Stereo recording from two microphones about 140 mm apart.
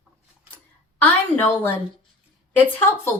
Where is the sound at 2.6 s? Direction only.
15° left (ahead or behind).